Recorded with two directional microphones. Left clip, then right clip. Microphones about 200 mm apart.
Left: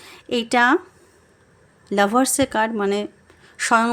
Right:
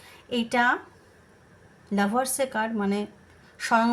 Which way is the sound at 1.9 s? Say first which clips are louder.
Left 8 dB; 45° left (ahead or behind).